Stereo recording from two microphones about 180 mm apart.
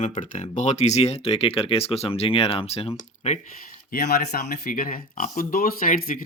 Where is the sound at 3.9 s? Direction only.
60° left (ahead or behind).